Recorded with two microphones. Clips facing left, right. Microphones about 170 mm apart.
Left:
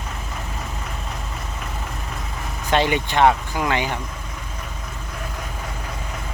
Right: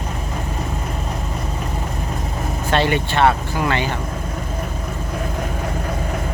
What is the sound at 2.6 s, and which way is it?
Speech, 15° left (ahead or behind).